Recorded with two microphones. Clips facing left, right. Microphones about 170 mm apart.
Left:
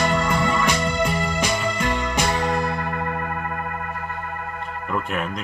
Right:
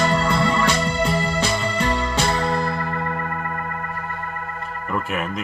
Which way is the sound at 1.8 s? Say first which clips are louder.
Right 2 dB; 35° right (ahead or behind).